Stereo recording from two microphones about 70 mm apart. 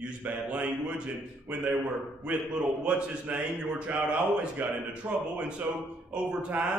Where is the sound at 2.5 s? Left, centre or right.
Centre.